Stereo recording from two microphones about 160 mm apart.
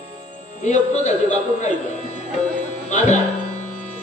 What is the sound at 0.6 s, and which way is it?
Speech, 45° left (ahead or behind).